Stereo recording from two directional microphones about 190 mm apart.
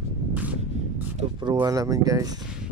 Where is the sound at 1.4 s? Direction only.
20° right (ahead or behind).